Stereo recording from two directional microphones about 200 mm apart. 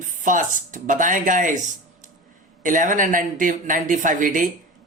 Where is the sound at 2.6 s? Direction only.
40° right (ahead or behind).